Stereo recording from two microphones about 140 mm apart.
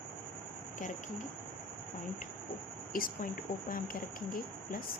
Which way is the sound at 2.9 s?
85° left.